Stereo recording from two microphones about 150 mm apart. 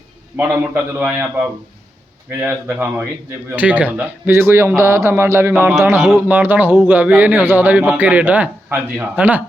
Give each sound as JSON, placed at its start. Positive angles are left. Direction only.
{"t": 0.3, "sound": "speech", "side_deg": -10}
{"t": 2.4, "sound": "speech", "side_deg": -10}
{"t": 5.5, "sound": "a man's voice", "side_deg": -5}